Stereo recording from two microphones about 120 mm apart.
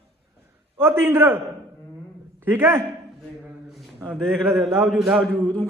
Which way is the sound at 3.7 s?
Centre (ahead or behind).